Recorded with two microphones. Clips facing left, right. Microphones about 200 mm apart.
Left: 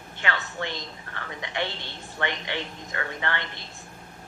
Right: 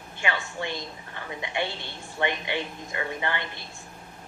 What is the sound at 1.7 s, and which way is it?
Speech, 20° left (ahead or behind).